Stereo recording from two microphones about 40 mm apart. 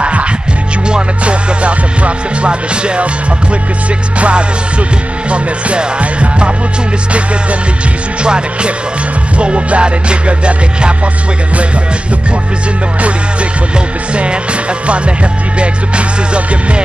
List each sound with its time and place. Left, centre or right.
0.0 s music: right
4.2 s music: right
8.2 s music: right
13.0 s music: right